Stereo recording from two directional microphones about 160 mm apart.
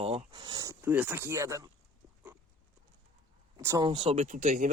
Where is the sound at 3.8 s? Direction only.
35° right (ahead or behind).